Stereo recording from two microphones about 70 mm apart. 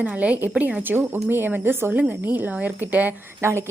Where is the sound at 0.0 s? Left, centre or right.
Centre.